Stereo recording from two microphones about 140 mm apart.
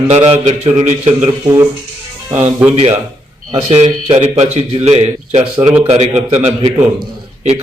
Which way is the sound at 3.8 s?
55° right (ahead or behind).